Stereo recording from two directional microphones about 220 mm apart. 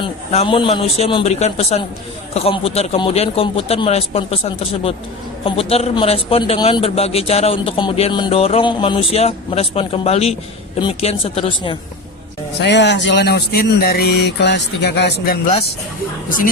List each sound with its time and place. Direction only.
0.0 s speech: 25° left (ahead or behind)
12.5 s speech: 50° left (ahead or behind)